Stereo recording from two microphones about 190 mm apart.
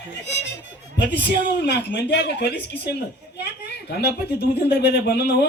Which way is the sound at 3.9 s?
60° left (ahead or behind).